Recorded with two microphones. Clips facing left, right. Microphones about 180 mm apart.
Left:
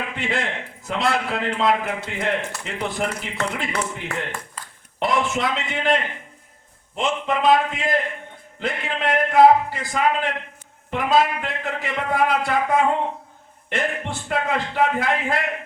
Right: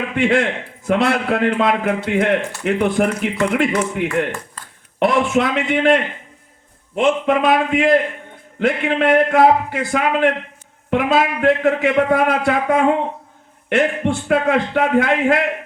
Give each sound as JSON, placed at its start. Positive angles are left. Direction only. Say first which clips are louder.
{"t": 0.2, "sound": "a man's voice", "louder": "right 12 dB", "side_deg": -60}